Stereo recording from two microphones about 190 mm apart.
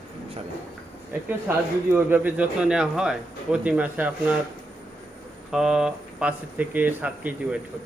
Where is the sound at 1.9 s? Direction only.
10° right (ahead or behind).